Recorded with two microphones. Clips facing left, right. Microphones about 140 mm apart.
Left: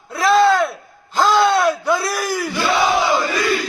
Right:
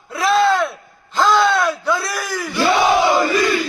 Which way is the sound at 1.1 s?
10° left (ahead or behind).